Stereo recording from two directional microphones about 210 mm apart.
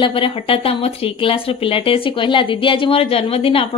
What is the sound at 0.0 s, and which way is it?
A woman's voice, 25° left (ahead or behind).